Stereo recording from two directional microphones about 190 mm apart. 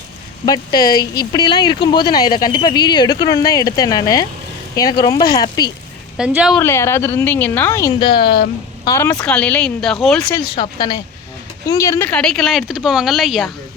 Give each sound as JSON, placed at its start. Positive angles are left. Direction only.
{"t": 0.4, "sound": "speech", "side_deg": 20}
{"t": 6.1, "sound": "speech", "side_deg": -5}
{"t": 6.6, "sound": "a woman's voice", "side_deg": 15}
{"t": 10.3, "sound": "speech", "side_deg": 25}